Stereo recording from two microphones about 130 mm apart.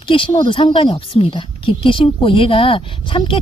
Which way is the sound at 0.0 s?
45° left (ahead or behind).